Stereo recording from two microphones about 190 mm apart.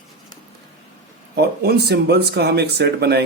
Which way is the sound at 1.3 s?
60° right (ahead or behind).